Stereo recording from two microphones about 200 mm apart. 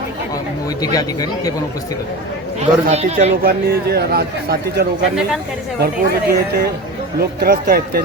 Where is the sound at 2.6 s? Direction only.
35° right (ahead or behind).